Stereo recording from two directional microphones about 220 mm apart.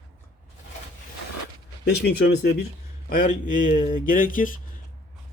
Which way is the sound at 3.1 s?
40° left (ahead or behind).